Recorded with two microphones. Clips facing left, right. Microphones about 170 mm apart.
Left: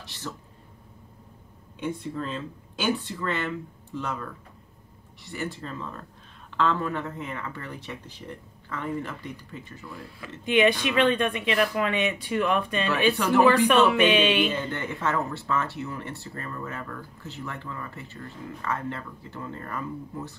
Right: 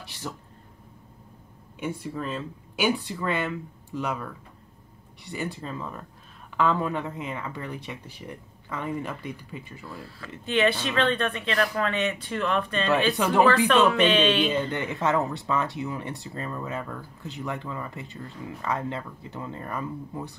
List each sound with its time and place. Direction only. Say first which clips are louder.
0.0 s a sound: right 1 dB; 10° right (ahead or behind)
1.8 s speech: left 1 dB; 10° right (ahead or behind)
10.4 s speech: left 2 dB; 15° left (ahead or behind)
13.1 s speech: left 1 dB; 15° right (ahead or behind)
13.9 s speech: even; 10° left (ahead or behind)
14.5 s speech: right 3 dB; 15° right (ahead or behind)